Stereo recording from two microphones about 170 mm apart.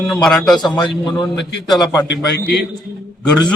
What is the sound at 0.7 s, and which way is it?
Speech, 25° left (ahead or behind).